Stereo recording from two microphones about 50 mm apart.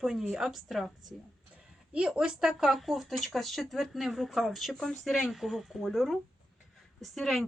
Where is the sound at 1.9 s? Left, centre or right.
Centre.